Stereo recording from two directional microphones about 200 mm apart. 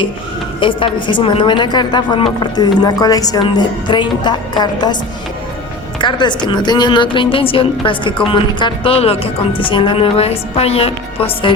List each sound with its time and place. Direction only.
0.6 s speech: 25° left (ahead or behind)
6.0 s speech: 25° left (ahead or behind)